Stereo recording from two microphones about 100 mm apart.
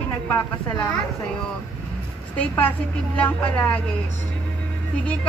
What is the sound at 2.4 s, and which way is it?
Speech, 15° left (ahead or behind).